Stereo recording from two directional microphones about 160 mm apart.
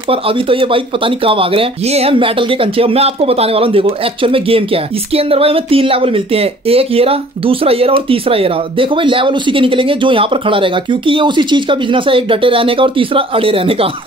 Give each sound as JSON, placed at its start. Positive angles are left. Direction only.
{"t": 0.1, "sound": "speech", "side_deg": -35}